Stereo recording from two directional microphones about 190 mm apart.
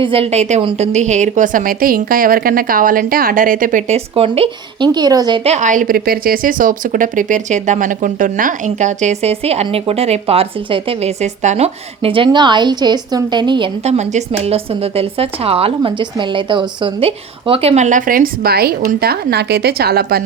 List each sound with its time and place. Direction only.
0.0 s a woman's voice: 30° right (ahead or behind); by 20.2 s 55° right (ahead or behind)